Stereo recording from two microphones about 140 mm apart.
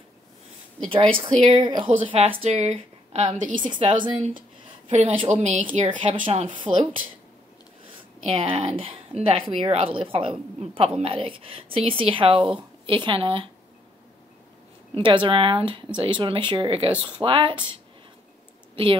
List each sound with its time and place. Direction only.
0.8 s a woman's voice: 35° right (ahead or behind)
3.6 s a woman's voice: 35° right (ahead or behind)
4.8 s a woman's voice: 45° right (ahead or behind)
5.7 s a woman's voice: 40° right (ahead or behind)
8.3 s a woman's voice: 40° right (ahead or behind)
15.0 s a woman's voice: 35° right (ahead or behind)